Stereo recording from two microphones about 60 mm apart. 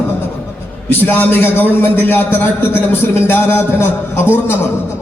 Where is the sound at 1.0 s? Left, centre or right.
Left.